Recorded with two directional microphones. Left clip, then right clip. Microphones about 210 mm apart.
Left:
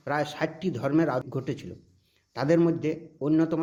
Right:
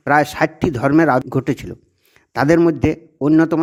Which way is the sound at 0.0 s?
55° right (ahead or behind).